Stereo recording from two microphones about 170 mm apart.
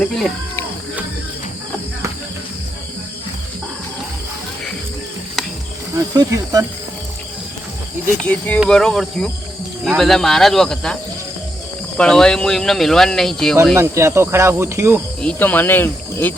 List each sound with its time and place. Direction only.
0.0 s speech: 10° left (ahead or behind)
5.9 s speech: 20° right (ahead or behind)
8.2 s speech: 10° left (ahead or behind)
11.9 s speech: 5° left (ahead or behind)
13.7 s cricket: 15° right (ahead or behind)
15.2 s speech: 10° left (ahead or behind)